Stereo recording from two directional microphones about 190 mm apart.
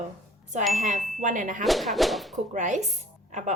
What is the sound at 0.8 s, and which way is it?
Ding, 40° right (ahead or behind).